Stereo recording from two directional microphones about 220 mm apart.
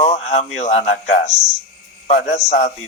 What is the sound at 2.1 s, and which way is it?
Speech, 30° left (ahead or behind).